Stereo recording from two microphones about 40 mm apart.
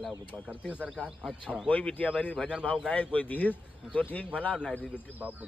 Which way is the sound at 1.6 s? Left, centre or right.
Left.